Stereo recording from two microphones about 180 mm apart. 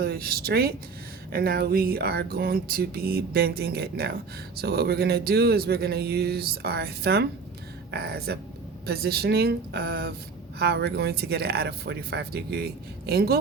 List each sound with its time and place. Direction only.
0.0 s speech: 60° right (ahead or behind)